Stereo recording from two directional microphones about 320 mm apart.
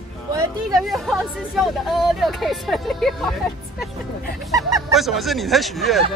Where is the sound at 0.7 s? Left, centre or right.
Centre.